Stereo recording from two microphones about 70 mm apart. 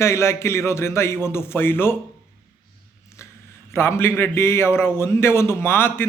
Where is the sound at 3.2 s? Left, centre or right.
Left.